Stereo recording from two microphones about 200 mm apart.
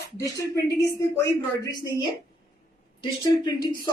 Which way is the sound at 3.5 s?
20° left (ahead or behind).